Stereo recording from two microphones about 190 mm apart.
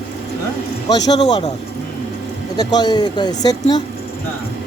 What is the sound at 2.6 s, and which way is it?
Speech, 20° left (ahead or behind).